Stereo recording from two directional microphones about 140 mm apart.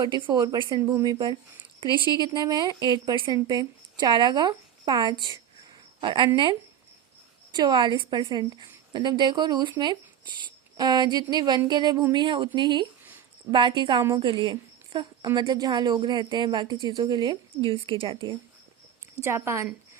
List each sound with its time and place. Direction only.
0.2 s a woman's voice: 30° right (ahead or behind)
19.2 s a woman's voice: 20° right (ahead or behind)